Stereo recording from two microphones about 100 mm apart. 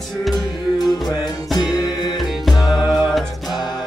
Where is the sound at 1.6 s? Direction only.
40° left (ahead or behind).